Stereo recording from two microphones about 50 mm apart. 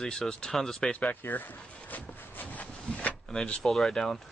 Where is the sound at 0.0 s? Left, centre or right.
Centre.